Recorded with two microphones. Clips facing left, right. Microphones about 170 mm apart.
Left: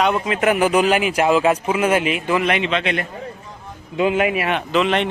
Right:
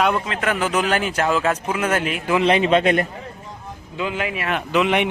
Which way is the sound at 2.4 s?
30° right (ahead or behind).